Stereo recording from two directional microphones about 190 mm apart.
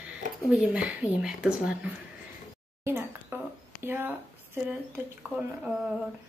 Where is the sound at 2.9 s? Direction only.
10° right (ahead or behind).